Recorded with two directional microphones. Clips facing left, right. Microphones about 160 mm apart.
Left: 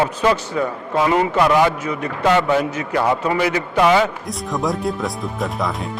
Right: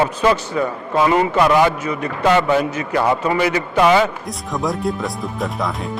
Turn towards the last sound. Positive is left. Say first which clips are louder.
# even
turn(degrees=0)  # may be behind; listen again after turning